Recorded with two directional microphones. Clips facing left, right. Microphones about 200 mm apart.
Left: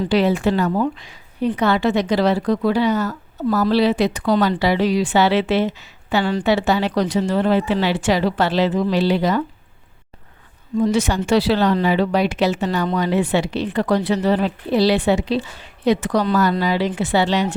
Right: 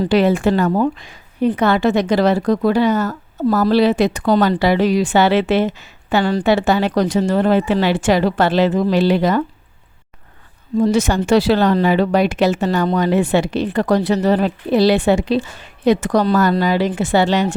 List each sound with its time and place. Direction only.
0.0 s speech: 50° right (ahead or behind)
10.8 s speech: 40° right (ahead or behind)